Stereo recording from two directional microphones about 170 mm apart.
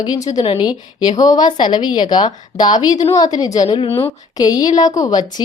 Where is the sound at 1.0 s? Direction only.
20° left (ahead or behind).